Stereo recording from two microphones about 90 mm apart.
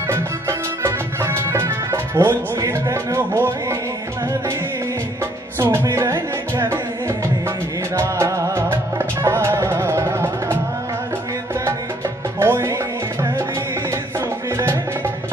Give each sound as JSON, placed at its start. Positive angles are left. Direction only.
{"t": 0.1, "sound": "music", "side_deg": -30}
{"t": 5.6, "sound": "music", "side_deg": -30}
{"t": 12.4, "sound": "music", "side_deg": -30}